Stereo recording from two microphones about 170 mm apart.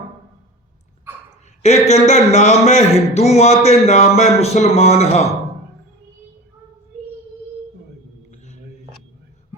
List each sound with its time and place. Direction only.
1.6 s speech: 40° left (ahead or behind)